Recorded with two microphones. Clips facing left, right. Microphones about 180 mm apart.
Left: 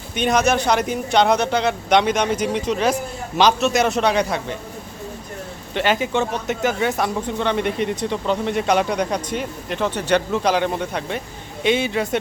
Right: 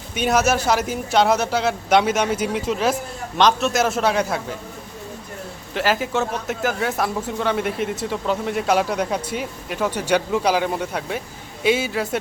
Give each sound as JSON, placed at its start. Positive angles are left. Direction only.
{"t": 0.1, "sound": "speech", "side_deg": -5}
{"t": 5.7, "sound": "speech", "side_deg": 0}